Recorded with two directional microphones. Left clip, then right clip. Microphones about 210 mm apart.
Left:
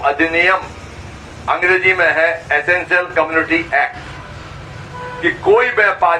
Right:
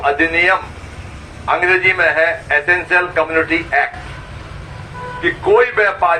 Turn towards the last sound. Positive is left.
turn(degrees=-25)  # may be behind; listen again after turning